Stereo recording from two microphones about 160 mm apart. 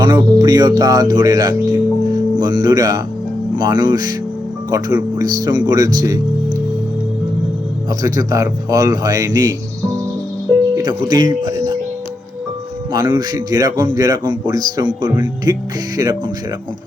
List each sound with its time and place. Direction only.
0.0 s speech: 25° right (ahead or behind)
7.9 s speech: 20° right (ahead or behind)
10.8 s speech: 25° right (ahead or behind)
12.9 s speech: 25° right (ahead or behind)